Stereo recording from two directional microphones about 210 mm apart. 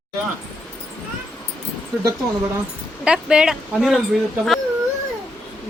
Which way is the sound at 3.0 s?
5° right (ahead or behind).